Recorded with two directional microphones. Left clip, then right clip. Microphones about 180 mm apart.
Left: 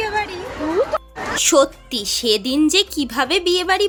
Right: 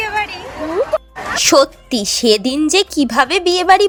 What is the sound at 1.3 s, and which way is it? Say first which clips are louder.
A woman's voice: right 4 dB; 35° right (ahead or behind).